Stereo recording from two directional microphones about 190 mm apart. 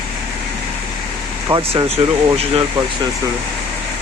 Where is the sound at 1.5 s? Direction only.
30° right (ahead or behind).